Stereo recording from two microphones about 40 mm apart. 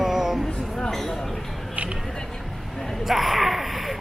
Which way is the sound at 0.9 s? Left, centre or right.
Centre.